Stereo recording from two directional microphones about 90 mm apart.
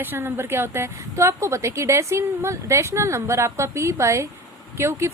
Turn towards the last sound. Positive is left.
turn(degrees=-30)  # may be behind; listen again after turning